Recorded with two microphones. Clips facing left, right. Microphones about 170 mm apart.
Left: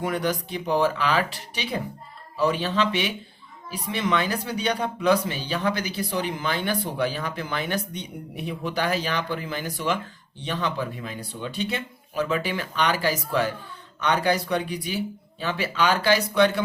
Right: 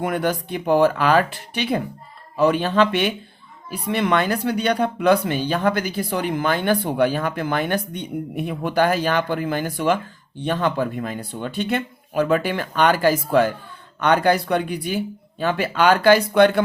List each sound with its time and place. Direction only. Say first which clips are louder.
0.0 s speech: right 4 dB; 55° right (ahead or behind)